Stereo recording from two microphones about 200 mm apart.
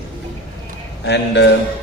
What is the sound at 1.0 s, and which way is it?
Speech, 60° left (ahead or behind).